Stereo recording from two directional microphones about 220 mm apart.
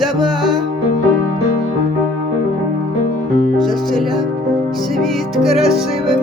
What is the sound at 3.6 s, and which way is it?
Music, centre (ahead or behind).